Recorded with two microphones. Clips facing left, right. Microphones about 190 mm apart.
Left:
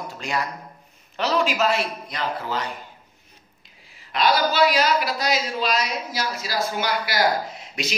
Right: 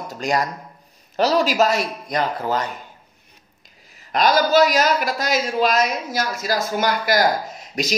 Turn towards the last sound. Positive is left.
turn(degrees=-45)  # may be behind; listen again after turning